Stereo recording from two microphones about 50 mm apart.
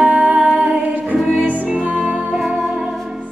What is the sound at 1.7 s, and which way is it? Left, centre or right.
Music, right.